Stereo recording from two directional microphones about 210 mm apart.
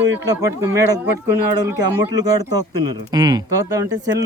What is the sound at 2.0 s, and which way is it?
Speech, 20° right (ahead or behind).